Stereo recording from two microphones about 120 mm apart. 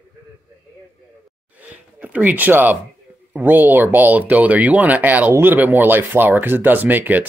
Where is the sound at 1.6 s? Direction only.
10° right (ahead or behind).